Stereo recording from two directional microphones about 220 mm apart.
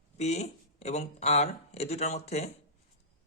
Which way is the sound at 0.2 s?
30° left (ahead or behind).